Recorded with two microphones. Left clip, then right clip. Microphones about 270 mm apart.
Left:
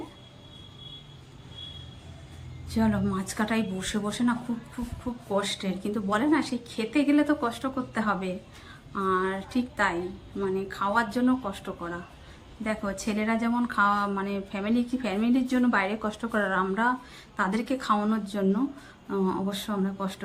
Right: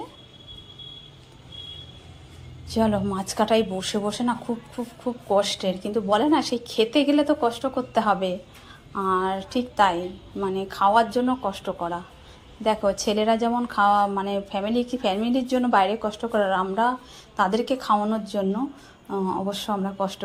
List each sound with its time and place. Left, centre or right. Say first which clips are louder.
2.6 s a woman's voice: right 5 dB; centre
5.3 s a woman's voice: right 7 dB; centre
19.0 s speech: right 1 dB; centre
19.3 s a woman's voice: right 5 dB; centre